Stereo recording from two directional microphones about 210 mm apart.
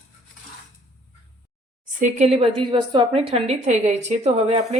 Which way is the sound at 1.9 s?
30° right (ahead or behind).